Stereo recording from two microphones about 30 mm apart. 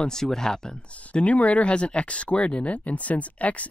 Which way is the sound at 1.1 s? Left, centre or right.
Left.